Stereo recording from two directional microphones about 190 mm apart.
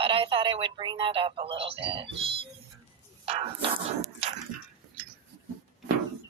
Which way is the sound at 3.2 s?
30° right (ahead or behind).